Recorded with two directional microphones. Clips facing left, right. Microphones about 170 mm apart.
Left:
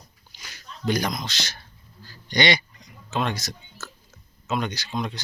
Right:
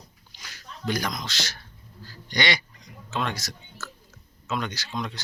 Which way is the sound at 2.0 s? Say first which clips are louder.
Left 4 dB; 20° left (ahead or behind).